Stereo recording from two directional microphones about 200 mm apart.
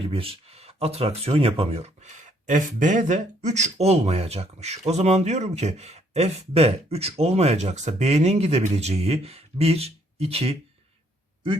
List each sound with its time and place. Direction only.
0.0 s speech: 30° right (ahead or behind)